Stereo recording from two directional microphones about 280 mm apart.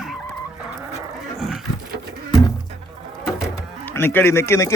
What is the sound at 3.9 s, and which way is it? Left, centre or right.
Speech, centre.